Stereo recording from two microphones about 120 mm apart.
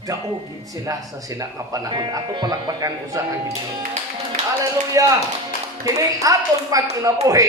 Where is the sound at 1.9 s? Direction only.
35° right (ahead or behind).